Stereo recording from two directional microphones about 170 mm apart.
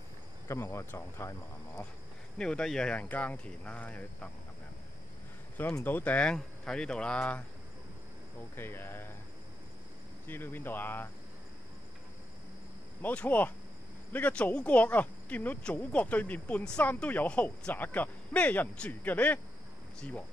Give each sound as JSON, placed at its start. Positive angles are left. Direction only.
{"t": 0.5, "sound": "speech", "side_deg": 15}
{"t": 2.3, "sound": "speech", "side_deg": 5}
{"t": 5.6, "sound": "speech", "side_deg": 10}
{"t": 8.5, "sound": "speech", "side_deg": 15}
{"t": 10.2, "sound": "speech", "side_deg": 10}
{"t": 13.0, "sound": "speech", "side_deg": 10}